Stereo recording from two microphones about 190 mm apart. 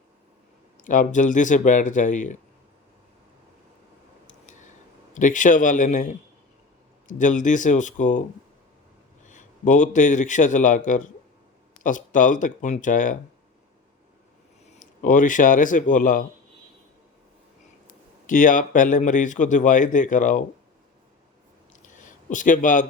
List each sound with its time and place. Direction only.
0.8 s speech: 45° left (ahead or behind)
5.1 s a man's voice: 40° left (ahead or behind)
9.2 s a man's voice: 40° left (ahead or behind)
14.7 s a man's voice: 45° left (ahead or behind)
18.3 s a man's voice: 45° left (ahead or behind)
21.8 s a sound: 40° left (ahead or behind)